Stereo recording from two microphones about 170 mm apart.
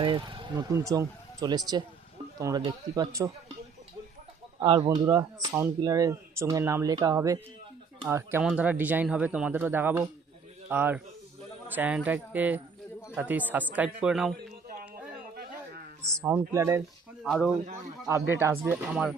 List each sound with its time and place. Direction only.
0.0 s speech: 30° right (ahead or behind)
4.8 s speech: 20° right (ahead or behind)
16.5 s speech: 15° right (ahead or behind)
17.2 s speech: centre (ahead or behind)
18.1 s speech: 15° right (ahead or behind)